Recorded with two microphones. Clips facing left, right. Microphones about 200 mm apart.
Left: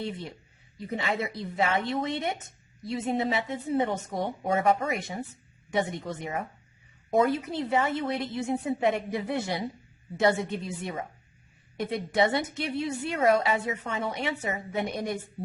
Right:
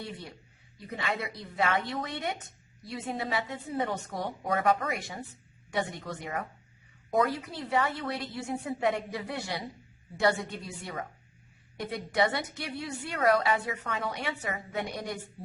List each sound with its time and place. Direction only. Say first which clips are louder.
0.0 s a woman's voice: left 6 dB; 25° left (ahead or behind)